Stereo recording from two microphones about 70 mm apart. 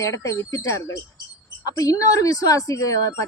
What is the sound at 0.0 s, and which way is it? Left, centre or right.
A woman's voice, left.